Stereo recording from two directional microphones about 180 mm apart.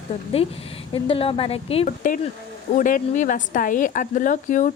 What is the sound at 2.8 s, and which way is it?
A woman's voice, 45° left (ahead or behind).